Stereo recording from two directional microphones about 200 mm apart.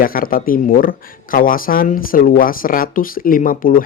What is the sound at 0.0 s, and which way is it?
Speech, 45° left (ahead or behind).